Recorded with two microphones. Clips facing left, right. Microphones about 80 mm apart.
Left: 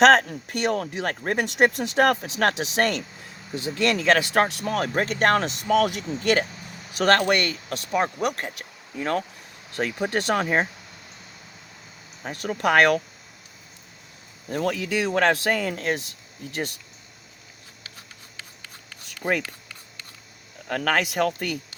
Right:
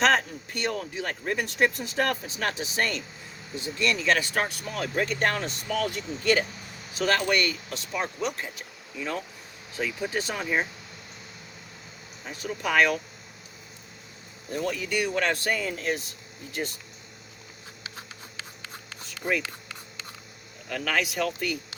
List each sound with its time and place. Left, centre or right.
0.0 s speech: left
9.7 s speech: left
10.4 s speech: left
12.2 s speech: left
14.5 s speech: left
20.7 s speech: left